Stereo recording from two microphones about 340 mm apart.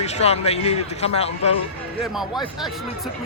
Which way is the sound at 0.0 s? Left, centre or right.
Centre.